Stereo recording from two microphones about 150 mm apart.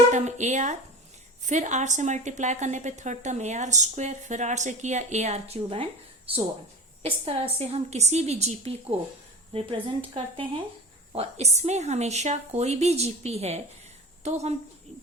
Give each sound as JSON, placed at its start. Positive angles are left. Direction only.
{"t": 0.1, "sound": "a woman's voice", "side_deg": -50}
{"t": 5.7, "sound": "a woman's voice", "side_deg": -35}